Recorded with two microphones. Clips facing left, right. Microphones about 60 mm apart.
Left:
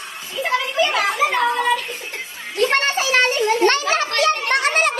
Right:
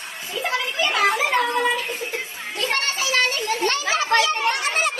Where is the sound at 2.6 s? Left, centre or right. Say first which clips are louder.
Left 6 dB; left.